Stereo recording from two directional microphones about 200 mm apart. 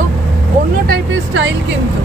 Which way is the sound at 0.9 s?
65° right (ahead or behind).